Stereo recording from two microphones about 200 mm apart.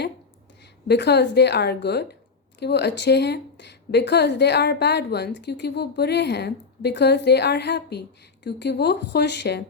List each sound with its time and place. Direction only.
0.6 s a woman's voice: 55° left (ahead or behind)